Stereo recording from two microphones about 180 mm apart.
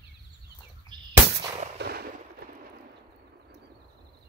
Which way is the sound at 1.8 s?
60° right (ahead or behind).